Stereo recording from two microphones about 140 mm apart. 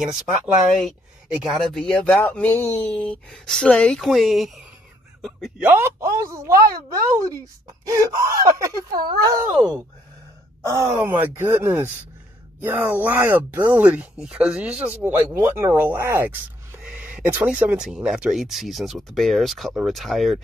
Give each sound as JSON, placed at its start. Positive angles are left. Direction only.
{"t": 0.0, "sound": "speech", "side_deg": -5}
{"t": 7.8, "sound": "speech", "side_deg": -20}
{"t": 10.6, "sound": "speech", "side_deg": -20}